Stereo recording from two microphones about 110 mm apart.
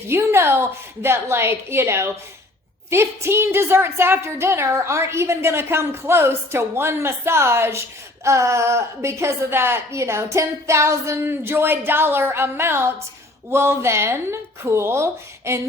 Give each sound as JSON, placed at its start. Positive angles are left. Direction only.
{"t": 0.1, "sound": "a woman's voice", "side_deg": -25}